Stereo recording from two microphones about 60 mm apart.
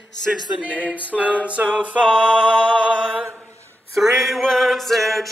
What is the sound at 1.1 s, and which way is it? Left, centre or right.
Male singing, right.